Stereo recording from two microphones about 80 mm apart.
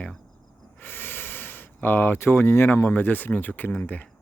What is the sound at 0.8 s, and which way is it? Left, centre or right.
Speech, left.